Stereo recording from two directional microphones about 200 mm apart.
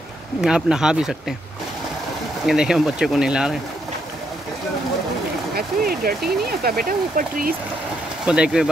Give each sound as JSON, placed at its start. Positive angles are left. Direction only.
{"t": 0.4, "sound": "speech", "side_deg": -5}
{"t": 2.4, "sound": "speech", "side_deg": -5}
{"t": 5.6, "sound": "speech", "side_deg": -50}
{"t": 8.3, "sound": "speech", "side_deg": -5}